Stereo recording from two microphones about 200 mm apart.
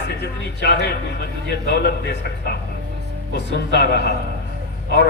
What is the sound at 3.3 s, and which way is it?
Speech, 55° left (ahead or behind).